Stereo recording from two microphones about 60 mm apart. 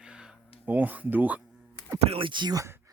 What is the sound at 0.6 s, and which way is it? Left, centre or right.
Speech, right.